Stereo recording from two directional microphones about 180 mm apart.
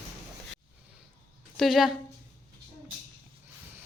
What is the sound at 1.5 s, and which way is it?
Speech, centre (ahead or behind).